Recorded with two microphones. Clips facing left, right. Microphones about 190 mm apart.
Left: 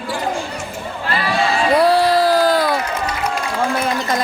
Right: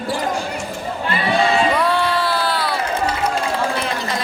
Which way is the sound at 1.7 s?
35° left (ahead or behind).